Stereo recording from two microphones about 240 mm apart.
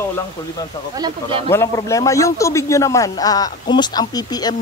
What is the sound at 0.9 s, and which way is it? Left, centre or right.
Speech, centre.